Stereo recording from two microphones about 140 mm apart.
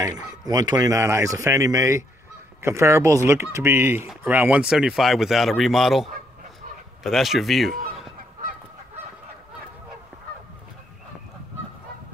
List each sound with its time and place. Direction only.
0.5 s a man's voice: 25° right (ahead or behind); by 7.8 s centre (ahead or behind)